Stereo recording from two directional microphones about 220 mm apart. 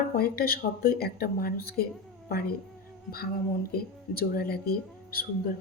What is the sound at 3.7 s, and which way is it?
Speech, 40° left (ahead or behind).